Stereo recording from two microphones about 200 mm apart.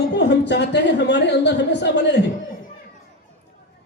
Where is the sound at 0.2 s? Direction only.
60° left (ahead or behind).